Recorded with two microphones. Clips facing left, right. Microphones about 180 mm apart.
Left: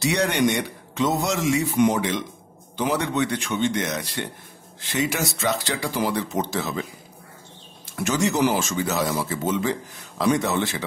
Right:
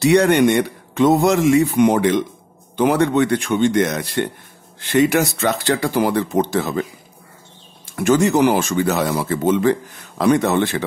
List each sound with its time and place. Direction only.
0.0 s speech: 55° right (ahead or behind)